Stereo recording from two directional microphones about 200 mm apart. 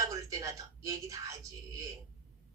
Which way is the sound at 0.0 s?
15° right (ahead or behind).